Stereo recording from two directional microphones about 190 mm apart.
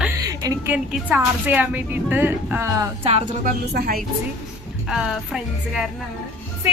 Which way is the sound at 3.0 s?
40° right (ahead or behind).